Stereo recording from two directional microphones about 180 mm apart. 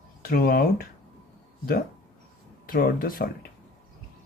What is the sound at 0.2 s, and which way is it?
Speech, 55° left (ahead or behind).